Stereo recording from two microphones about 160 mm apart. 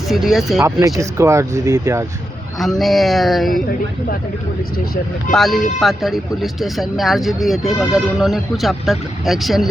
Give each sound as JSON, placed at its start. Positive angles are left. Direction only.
{"t": 0.1, "sound": "speech", "side_deg": 0}
{"t": 0.6, "sound": "speech", "side_deg": -20}
{"t": 2.6, "sound": "speech", "side_deg": 0}
{"t": 5.3, "sound": "speech", "side_deg": 0}